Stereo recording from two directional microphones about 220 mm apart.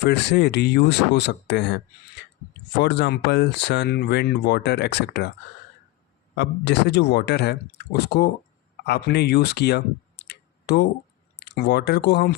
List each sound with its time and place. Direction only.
0.0 s speech: 50° left (ahead or behind)
6.3 s speech: 50° left (ahead or behind)